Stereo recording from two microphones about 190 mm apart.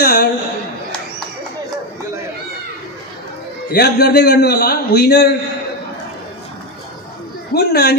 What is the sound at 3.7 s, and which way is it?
A man's voice, 60° left (ahead or behind).